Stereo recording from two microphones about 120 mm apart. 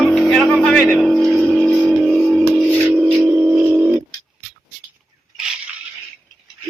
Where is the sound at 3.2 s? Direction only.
20° right (ahead or behind).